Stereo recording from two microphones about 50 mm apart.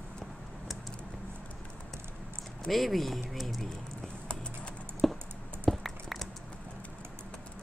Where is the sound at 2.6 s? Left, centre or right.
Centre.